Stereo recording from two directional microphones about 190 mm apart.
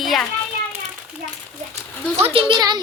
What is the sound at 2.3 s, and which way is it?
Speech, 25° right (ahead or behind).